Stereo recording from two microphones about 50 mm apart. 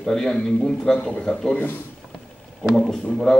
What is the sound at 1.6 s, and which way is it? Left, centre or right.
Speech, left.